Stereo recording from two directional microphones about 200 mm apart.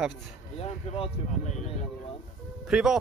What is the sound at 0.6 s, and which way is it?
Speech, 30° left (ahead or behind).